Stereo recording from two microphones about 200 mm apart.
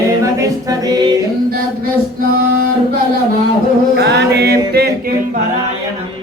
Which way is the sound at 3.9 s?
55° right (ahead or behind).